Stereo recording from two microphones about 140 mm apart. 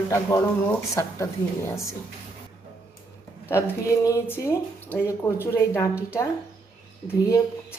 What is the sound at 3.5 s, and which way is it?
Speech, 20° left (ahead or behind).